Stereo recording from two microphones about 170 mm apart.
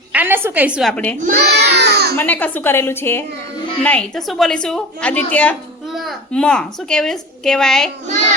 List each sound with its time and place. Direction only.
0.1 s a woman's voice: 10° right (ahead or behind); by 1.1 s 5° left (ahead or behind)
1.2 s a sound: 65° right (ahead or behind)
2.1 s a woman's voice: 10° left (ahead or behind)